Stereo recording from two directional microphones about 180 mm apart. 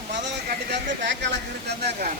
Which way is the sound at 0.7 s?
80° right.